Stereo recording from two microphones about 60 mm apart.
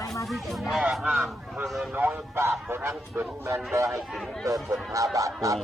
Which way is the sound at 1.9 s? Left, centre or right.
Right.